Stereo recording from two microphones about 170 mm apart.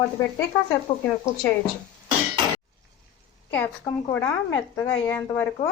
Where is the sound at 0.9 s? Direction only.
30° left (ahead or behind).